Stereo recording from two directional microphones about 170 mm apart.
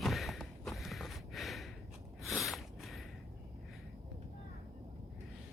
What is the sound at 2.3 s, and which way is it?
Snort, centre (ahead or behind).